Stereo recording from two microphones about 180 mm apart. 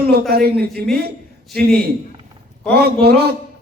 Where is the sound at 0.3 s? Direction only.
60° right (ahead or behind).